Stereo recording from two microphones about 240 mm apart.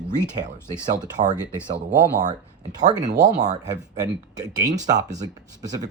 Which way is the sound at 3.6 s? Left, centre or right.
Centre.